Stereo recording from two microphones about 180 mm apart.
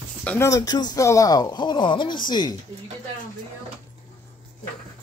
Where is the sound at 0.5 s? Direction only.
20° left (ahead or behind).